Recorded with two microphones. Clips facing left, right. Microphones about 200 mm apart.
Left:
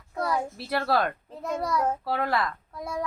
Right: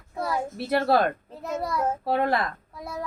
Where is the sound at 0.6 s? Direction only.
25° right (ahead or behind).